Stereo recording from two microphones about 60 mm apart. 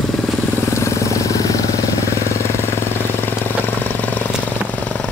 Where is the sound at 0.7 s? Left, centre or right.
Left.